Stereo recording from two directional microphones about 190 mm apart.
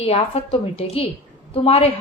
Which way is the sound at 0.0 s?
30° left (ahead or behind).